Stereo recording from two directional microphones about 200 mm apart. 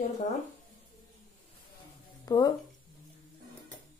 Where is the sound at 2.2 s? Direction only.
20° left (ahead or behind).